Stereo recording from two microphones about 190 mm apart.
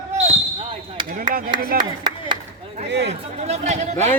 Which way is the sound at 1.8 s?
25° right (ahead or behind).